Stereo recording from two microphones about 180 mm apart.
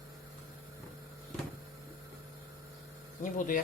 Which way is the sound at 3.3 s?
50° left (ahead or behind).